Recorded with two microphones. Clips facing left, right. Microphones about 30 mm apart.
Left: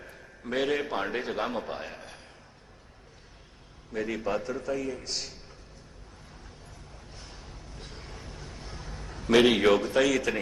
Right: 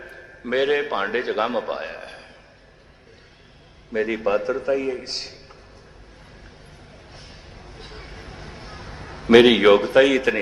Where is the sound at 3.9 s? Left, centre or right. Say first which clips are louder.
Right 9 dB; right.